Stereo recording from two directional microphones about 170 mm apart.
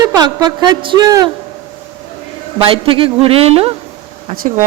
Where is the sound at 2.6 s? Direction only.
30° right (ahead or behind).